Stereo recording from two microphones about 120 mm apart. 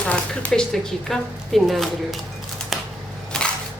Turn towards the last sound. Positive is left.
turn(degrees=5)  # may be behind; listen again after turning